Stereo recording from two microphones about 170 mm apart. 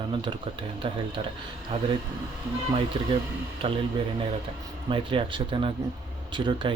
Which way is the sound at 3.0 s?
25° right (ahead or behind).